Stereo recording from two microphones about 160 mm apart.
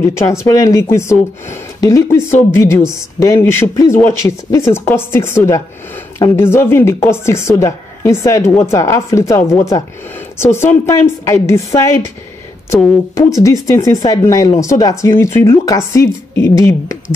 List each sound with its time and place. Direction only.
0.0 s a woman's voice: 15° left (ahead or behind)
13.1 s speech: 20° left (ahead or behind)